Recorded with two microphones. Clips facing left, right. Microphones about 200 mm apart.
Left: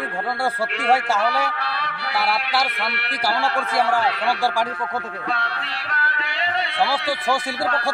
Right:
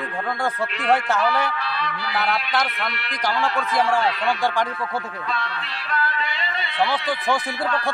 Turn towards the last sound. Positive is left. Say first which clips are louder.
# right 1 dB
turn(degrees=70)  # may be behind; listen again after turning